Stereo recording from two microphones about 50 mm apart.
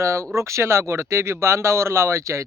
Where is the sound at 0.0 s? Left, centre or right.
Right.